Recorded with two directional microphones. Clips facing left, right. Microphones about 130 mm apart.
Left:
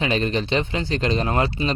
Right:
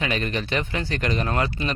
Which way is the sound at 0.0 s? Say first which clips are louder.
Left 4 dB; 30° left (ahead or behind).